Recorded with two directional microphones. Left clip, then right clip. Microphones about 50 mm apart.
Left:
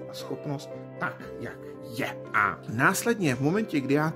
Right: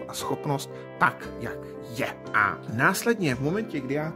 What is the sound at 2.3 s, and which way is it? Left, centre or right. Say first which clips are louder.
Speech: right 2 dB; centre.